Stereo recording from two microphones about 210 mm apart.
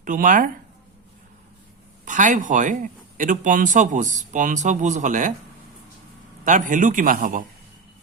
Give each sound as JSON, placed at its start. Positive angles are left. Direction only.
{"t": 0.0, "sound": "speech", "side_deg": -40}
{"t": 2.0, "sound": "speech", "side_deg": -35}
{"t": 6.4, "sound": "speech", "side_deg": -40}